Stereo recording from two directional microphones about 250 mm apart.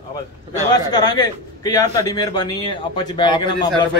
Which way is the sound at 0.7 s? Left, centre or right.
Centre.